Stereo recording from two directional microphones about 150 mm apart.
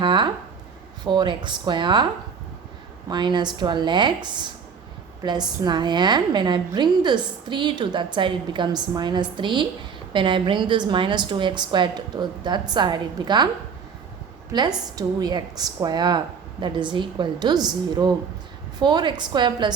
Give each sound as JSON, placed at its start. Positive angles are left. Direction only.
{"t": 0.0, "sound": "a woman's voice", "side_deg": -30}
{"t": 3.1, "sound": "a woman's voice", "side_deg": -30}
{"t": 14.9, "sound": "a woman's voice", "side_deg": -25}